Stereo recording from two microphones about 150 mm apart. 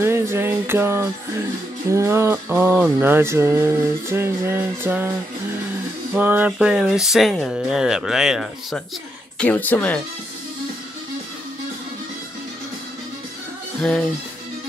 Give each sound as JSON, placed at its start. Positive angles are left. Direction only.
{"t": 0.0, "sound": "music", "side_deg": -15}
{"t": 6.1, "sound": "speech", "side_deg": -10}
{"t": 9.4, "sound": "speech", "side_deg": 10}